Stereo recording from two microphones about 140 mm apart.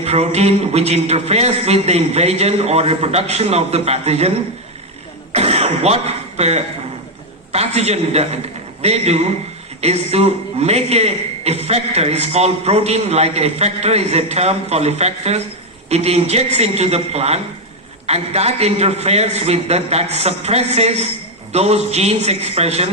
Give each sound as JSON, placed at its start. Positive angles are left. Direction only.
{"t": 0.0, "sound": "a man's voice", "side_deg": -50}
{"t": 5.3, "sound": "cough", "side_deg": -50}
{"t": 7.5, "sound": "a man's voice", "side_deg": -50}